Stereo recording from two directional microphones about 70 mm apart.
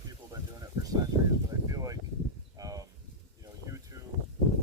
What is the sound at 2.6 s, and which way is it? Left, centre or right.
Snake, right.